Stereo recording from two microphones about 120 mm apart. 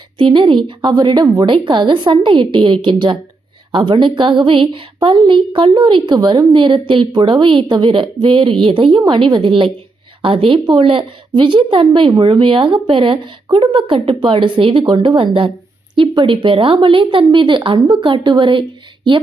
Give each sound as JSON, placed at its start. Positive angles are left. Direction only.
{"t": 0.2, "sound": "a woman's voice", "side_deg": -45}